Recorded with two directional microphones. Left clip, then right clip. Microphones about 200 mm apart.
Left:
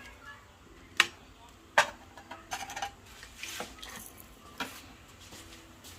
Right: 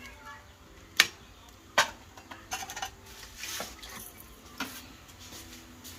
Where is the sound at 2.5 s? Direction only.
25° left (ahead or behind).